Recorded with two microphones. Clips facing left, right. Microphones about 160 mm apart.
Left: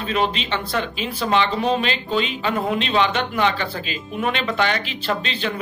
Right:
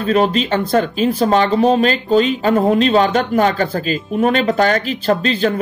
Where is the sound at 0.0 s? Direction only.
40° right (ahead or behind).